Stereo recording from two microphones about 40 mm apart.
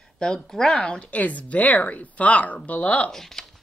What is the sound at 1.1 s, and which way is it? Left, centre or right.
A woman's voice, left.